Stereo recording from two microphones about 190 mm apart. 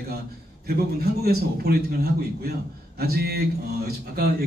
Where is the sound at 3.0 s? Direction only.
55° right (ahead or behind).